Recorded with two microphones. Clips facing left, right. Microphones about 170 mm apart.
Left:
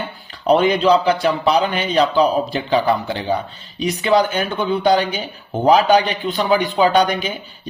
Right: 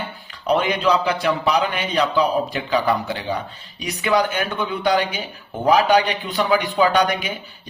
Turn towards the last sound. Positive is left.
turn(degrees=30)  # may be behind; listen again after turning